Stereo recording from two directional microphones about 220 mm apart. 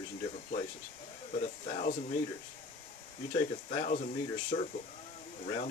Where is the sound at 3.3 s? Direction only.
35° left (ahead or behind).